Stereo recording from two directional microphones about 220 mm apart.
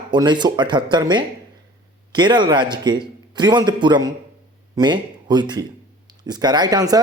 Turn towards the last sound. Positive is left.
turn(degrees=-15)  # may be behind; listen again after turning